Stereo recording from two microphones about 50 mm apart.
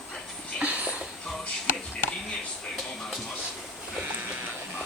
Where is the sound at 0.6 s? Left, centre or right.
Right.